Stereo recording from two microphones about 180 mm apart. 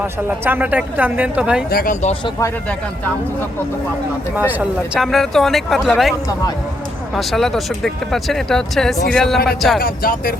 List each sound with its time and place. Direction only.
0.3 s a woman's voice: 10° right (ahead or behind)
1.7 s speech: 50° left (ahead or behind)
4.4 s a woman's voice: 10° right (ahead or behind)
5.0 s speech: centre (ahead or behind)
9.8 s speech: 55° left (ahead or behind)